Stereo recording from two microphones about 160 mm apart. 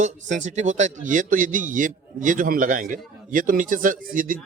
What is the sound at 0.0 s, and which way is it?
Speech, 50° right (ahead or behind).